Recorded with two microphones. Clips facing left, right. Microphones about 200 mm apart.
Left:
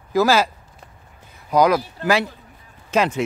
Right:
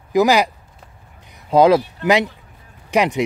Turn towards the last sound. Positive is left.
turn(degrees=-15)  # may be behind; listen again after turning